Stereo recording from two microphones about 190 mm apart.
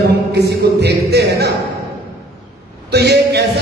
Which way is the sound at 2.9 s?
60° right (ahead or behind).